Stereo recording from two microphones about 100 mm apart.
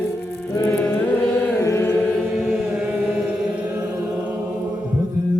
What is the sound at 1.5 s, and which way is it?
Music, 25° left (ahead or behind).